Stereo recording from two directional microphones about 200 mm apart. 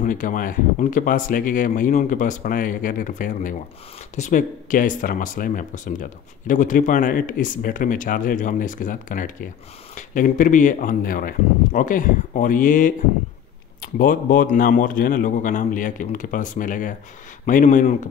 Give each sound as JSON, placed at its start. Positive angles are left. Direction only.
{"t": 0.0, "sound": "speech", "side_deg": 40}
{"t": 13.9, "sound": "speech", "side_deg": 45}